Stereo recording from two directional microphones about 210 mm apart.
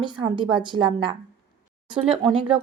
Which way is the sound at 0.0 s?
20° right (ahead or behind).